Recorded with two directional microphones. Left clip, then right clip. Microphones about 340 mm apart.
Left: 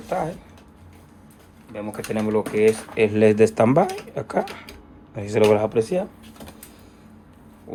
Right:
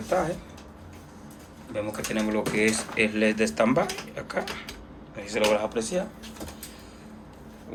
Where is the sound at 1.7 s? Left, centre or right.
Centre.